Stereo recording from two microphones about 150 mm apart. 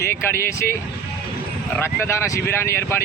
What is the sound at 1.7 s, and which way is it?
Speech, 15° left (ahead or behind).